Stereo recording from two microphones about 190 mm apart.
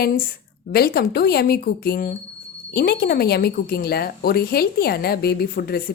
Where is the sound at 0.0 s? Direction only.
55° left (ahead or behind).